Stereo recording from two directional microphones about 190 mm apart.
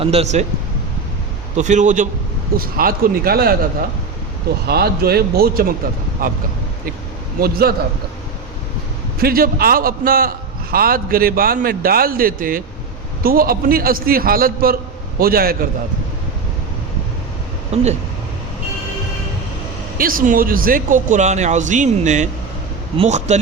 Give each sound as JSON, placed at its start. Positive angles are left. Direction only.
{"t": 0.0, "sound": "speech", "side_deg": -35}
{"t": 1.5, "sound": "a man's voice", "side_deg": -40}
{"t": 4.6, "sound": "a man's voice", "side_deg": -55}
{"t": 9.2, "sound": "a man's voice", "side_deg": -50}
{"t": 17.7, "sound": "speech", "side_deg": -35}
{"t": 20.0, "sound": "speech", "side_deg": -45}